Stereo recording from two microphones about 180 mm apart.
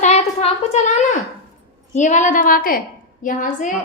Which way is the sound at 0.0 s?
35° left (ahead or behind).